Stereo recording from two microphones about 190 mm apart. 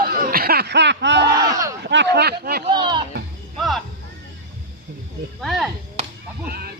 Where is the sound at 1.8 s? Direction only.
65° right (ahead or behind).